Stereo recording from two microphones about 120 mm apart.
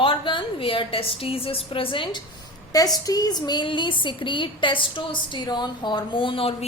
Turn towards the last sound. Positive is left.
turn(degrees=55)  # may be behind; listen again after turning